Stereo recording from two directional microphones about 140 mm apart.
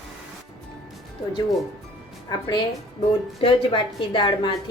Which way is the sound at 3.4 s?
35° left (ahead or behind).